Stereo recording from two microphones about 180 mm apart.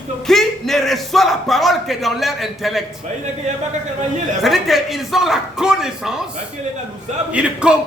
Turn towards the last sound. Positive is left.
turn(degrees=-5)  # may be behind; listen again after turning